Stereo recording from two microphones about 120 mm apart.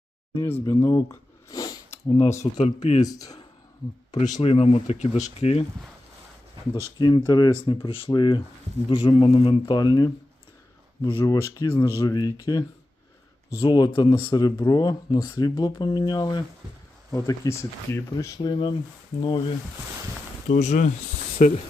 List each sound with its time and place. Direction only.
0.3 s speech: 20° left (ahead or behind)
0.6 s a sound: 25° left (ahead or behind)
1.9 s mechanisms: 60° left (ahead or behind)
2.6 s speech: 70° left (ahead or behind)
3.0 s speech: 30° left (ahead or behind)
4.1 s speech: 80° left; by 5.6 s 60° left (ahead or behind)
7.0 s speech: 40° left (ahead or behind)
11.2 s speech: 25° left (ahead or behind)
19.2 s speech: 40° left (ahead or behind)
20.5 s speech: 85° left